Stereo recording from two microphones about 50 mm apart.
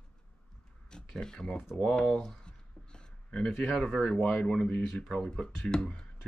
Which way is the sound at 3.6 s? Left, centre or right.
Centre.